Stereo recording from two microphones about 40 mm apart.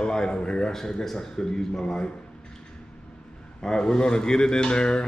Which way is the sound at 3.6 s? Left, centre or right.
Centre.